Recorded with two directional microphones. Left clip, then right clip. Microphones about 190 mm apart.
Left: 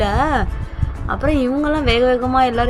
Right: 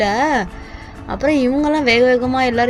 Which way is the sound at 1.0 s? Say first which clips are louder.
Right 2 dB; centre (ahead or behind).